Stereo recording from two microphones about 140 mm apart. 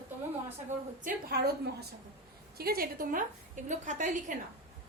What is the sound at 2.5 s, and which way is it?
A woman's voice, 90° right.